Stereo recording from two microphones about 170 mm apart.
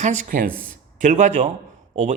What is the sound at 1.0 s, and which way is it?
Speech, 45° right (ahead or behind).